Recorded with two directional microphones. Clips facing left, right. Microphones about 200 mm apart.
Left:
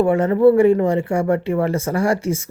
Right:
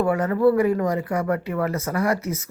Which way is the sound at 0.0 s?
25° left (ahead or behind).